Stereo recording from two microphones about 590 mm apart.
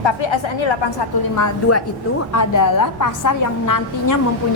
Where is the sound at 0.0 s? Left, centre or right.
Left.